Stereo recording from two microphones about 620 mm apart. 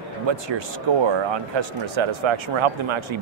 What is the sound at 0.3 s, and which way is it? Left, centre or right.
Speech, right.